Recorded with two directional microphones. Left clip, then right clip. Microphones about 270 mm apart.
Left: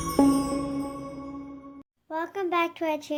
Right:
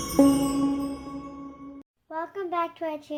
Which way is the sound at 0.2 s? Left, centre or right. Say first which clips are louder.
Right 2 dB; centre.